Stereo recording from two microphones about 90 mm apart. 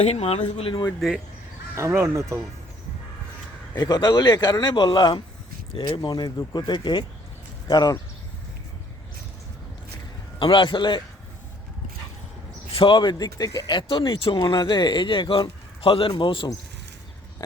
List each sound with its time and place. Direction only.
0.2 s speech: 90° left
2.0 s speech: 35° right (ahead or behind)
3.8 s a man's voice: 50° left (ahead or behind)
10.4 s speech: 65° left (ahead or behind)
12.7 s speech: 65° left (ahead or behind); by 13.7 s 45° left (ahead or behind)
13.7 s speech: 65° left (ahead or behind)